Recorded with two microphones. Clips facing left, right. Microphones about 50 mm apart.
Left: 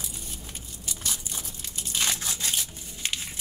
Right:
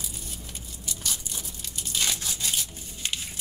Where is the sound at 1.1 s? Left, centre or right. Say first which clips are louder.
Even; left.